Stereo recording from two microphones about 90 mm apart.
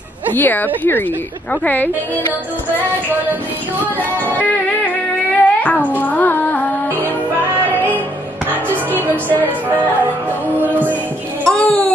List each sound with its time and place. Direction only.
0.3 s speech: 20° left (ahead or behind)
5.4 s music: 15° left (ahead or behind)
10.6 s music: 20° right (ahead or behind)
11.4 s a sound: 10° left (ahead or behind)